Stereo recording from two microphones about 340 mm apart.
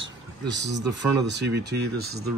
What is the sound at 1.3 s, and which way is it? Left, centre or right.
Speech, right.